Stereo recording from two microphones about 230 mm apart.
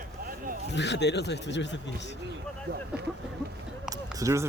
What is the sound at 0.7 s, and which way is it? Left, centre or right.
Speech, left.